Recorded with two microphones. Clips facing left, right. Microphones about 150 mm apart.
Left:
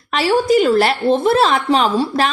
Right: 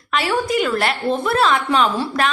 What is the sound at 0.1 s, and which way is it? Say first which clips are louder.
A woman's voice: left 6 dB; 30° left (ahead or behind).